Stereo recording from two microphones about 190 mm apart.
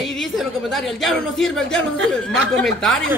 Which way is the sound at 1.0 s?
Centre (ahead or behind).